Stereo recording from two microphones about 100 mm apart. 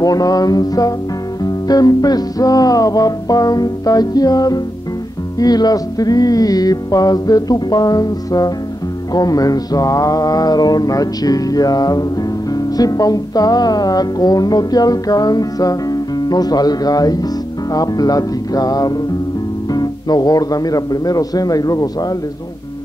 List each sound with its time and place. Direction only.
0.0 s mantra: 40° left (ahead or behind)